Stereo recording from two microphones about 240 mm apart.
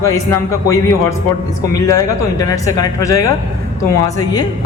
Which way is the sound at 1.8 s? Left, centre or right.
Centre.